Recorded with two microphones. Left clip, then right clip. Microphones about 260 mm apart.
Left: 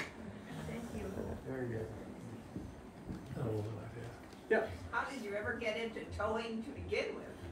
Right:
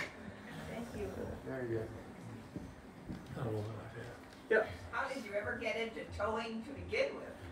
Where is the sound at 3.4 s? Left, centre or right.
Centre.